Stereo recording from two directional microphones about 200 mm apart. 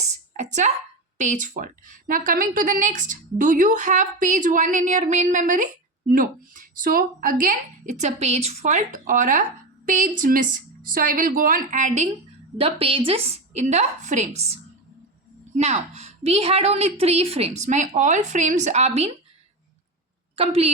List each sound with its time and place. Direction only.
0.3 s speech: 35° right (ahead or behind)
12.5 s speech: 30° right (ahead or behind)
15.5 s speech: 35° right (ahead or behind)
20.3 s a woman's voice: 30° right (ahead or behind)